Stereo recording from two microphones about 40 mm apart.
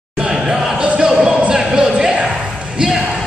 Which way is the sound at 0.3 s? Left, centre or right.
Centre.